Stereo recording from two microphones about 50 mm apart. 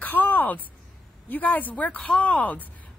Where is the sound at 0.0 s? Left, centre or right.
Left.